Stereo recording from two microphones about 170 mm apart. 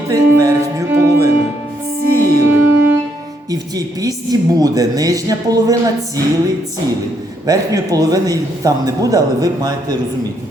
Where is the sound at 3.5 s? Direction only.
20° right (ahead or behind).